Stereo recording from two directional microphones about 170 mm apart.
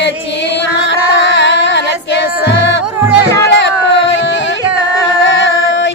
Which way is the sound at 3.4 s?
90° left.